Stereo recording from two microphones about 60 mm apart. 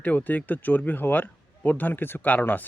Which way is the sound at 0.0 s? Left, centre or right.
Left.